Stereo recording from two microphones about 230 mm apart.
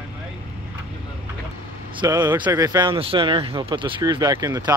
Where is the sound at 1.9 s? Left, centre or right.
Centre.